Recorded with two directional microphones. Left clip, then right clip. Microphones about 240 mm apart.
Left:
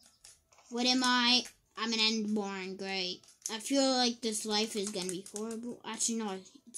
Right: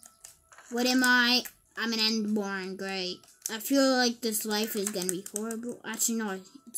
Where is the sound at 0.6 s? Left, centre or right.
Centre.